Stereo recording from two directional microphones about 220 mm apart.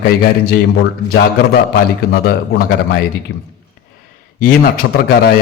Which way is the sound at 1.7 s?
45° left (ahead or behind).